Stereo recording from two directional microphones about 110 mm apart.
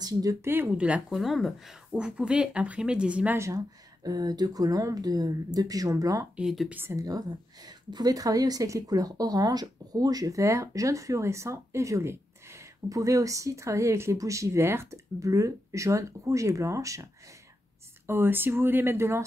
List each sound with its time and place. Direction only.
0.0 s speech: 30° right (ahead or behind); by 1.2 s 10° right (ahead or behind)
1.2 s speech: centre (ahead or behind)
3.3 s a woman's voice: 30° right (ahead or behind)
6.3 s speech: centre (ahead or behind)
6.7 s speech: 20° right (ahead or behind)
7.0 s a woman's voice: 35° right (ahead or behind)